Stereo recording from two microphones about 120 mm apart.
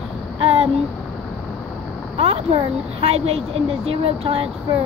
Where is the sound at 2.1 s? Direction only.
55° right (ahead or behind).